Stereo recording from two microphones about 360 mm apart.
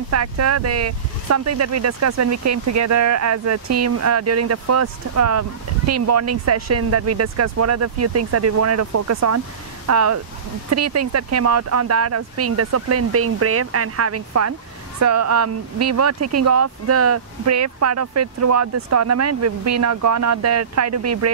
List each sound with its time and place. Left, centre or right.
0.1 s speech: right